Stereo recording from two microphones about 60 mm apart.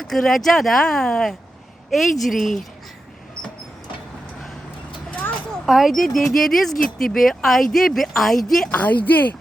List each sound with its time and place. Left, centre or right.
0.0 s a woman's voice: centre
5.6 s speech: centre
8.7 s a woman's voice: left